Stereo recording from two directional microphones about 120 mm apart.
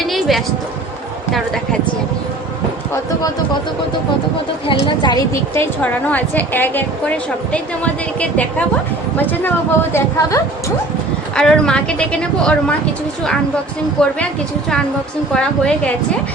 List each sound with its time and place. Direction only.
0.1 s music: centre (ahead or behind)
4.6 s speech: 45° left (ahead or behind)
5.3 s a woman's voice: 15° left (ahead or behind)
9.9 s a woman's voice: 25° left (ahead or behind)
11.3 s a woman's voice: 5° left (ahead or behind)
14.0 s a woman's voice: 5° left (ahead or behind)
15.4 s a woman's voice: 5° left (ahead or behind)